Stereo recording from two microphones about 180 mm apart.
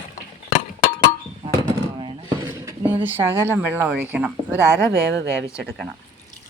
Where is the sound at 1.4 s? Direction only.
25° right (ahead or behind).